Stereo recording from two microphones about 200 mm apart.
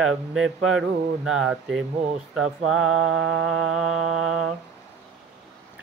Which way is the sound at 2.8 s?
90° right.